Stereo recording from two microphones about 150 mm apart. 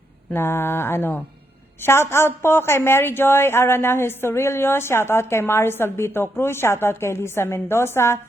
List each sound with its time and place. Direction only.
0.3 s a woman's voice: 15° left (ahead or behind)